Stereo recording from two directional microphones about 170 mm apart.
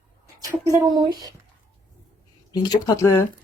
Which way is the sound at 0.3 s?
20° right (ahead or behind).